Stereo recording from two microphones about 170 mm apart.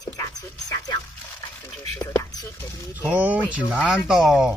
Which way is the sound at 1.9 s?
20° left (ahead or behind).